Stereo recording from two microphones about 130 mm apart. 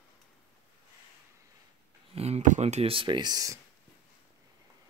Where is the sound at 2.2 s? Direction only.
60° right (ahead or behind); by 3.6 s 30° right (ahead or behind).